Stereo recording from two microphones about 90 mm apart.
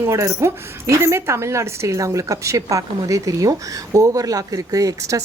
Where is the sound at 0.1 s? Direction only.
35° right (ahead or behind).